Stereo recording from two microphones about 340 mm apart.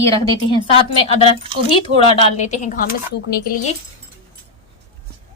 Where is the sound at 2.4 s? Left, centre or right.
Left.